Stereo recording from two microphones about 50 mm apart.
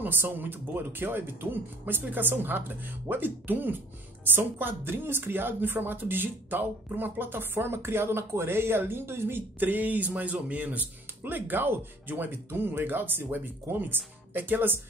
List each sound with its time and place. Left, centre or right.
0.0 s speech: right
9.6 s speech: right